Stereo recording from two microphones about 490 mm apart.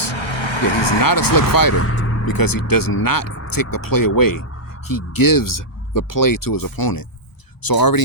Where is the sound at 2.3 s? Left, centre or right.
Left.